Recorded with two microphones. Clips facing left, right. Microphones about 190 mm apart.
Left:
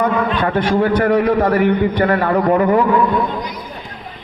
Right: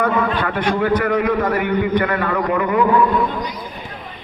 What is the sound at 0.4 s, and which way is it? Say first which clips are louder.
A man's voice: left 3 dB; 35° left (ahead or behind).